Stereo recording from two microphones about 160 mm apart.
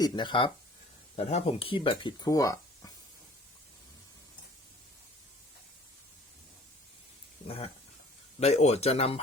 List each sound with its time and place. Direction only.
0.0 s speech: 25° left (ahead or behind)
1.1 s speech: 40° left (ahead or behind); by 2.9 s 20° left (ahead or behind)
7.4 s speech: 35° left (ahead or behind)